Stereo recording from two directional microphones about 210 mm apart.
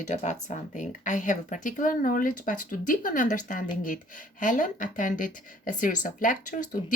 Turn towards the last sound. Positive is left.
turn(degrees=40)  # may be behind; listen again after turning